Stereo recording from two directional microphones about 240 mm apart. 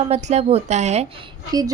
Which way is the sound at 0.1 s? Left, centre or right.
Right.